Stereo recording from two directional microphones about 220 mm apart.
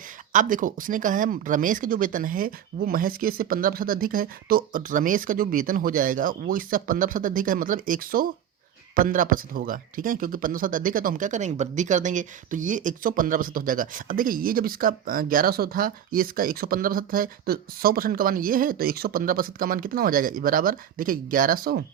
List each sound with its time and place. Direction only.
0.3 s speech: 40° right (ahead or behind)